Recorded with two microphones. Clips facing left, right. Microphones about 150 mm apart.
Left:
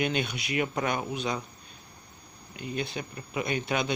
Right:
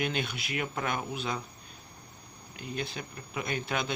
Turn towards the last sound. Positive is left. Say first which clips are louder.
# left 4 dB
turn(degrees=0)  # may be behind; listen again after turning